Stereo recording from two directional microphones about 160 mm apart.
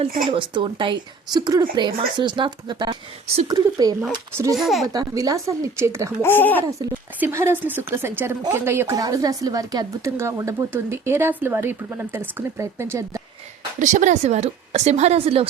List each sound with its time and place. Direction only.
0.3 s speech: 30° right (ahead or behind)
4.5 s a woman's voice: centre (ahead or behind)
4.9 s speech: 25° right (ahead or behind)
6.2 s speech: 10° left (ahead or behind)
6.7 s speech: 20° right (ahead or behind)
13.7 s a woman's voice: 50° right (ahead or behind)